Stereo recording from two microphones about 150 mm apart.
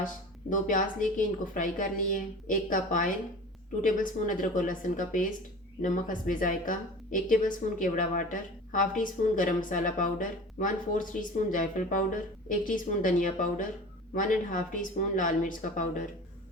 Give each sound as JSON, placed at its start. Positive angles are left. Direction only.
{"t": 0.5, "sound": "a woman's voice", "side_deg": 60}